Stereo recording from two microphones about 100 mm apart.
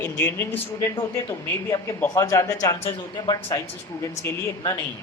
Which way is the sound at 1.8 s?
25° left (ahead or behind).